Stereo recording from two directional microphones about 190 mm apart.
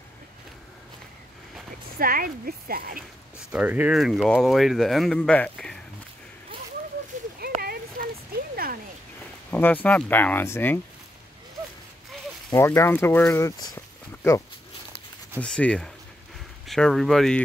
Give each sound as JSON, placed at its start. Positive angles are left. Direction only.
{"t": 2.0, "sound": "speech", "side_deg": -50}
{"t": 3.3, "sound": "speech", "side_deg": -5}
{"t": 7.3, "sound": "a sound", "side_deg": -55}
{"t": 9.5, "sound": "speech", "side_deg": 10}
{"t": 12.4, "sound": "speech", "side_deg": 15}
{"t": 15.4, "sound": "speech", "side_deg": 5}